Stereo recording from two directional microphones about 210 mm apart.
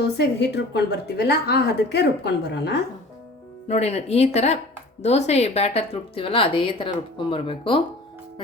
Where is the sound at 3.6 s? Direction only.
30° left (ahead or behind).